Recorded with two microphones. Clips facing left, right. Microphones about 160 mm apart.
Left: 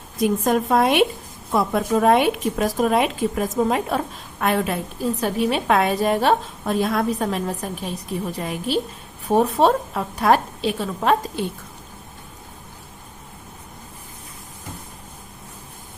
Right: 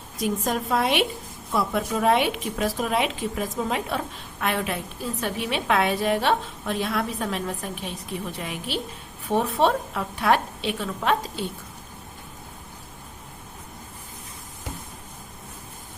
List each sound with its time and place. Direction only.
0.2 s a woman's voice: 50° left (ahead or behind)